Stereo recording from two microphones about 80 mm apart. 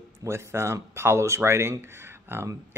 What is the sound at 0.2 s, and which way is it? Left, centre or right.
Speech, right.